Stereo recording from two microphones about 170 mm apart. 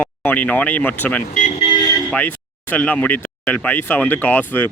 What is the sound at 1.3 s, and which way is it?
Speech, 45° left (ahead or behind).